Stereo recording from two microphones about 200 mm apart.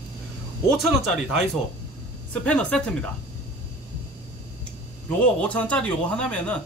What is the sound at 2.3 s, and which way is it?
Speech, 5° left (ahead or behind).